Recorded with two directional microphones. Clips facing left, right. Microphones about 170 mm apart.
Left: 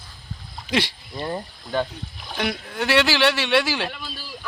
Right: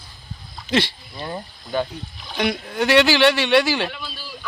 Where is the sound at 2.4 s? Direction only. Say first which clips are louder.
Right 4 dB; centre (ahead or behind).